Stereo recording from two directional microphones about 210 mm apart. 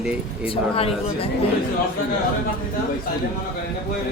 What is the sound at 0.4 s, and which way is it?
Speech, 25° left (ahead or behind).